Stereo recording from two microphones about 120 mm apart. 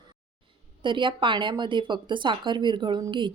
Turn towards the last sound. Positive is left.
turn(degrees=-40)  # may be behind; listen again after turning